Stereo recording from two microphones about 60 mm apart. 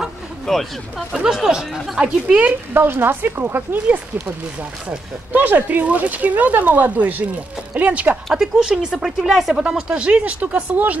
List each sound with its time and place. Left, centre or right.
0.5 s speech: centre
1.1 s speech: centre
2.7 s speech: right
4.8 s speech: right
8.4 s speech: centre
9.8 s speech: centre